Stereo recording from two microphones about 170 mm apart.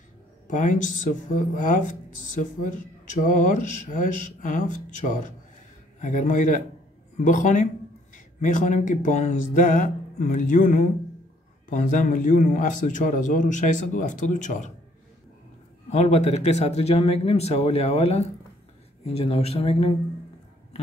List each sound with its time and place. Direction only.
0.5 s a man's voice: 45° left (ahead or behind)
15.9 s speech: 40° left (ahead or behind)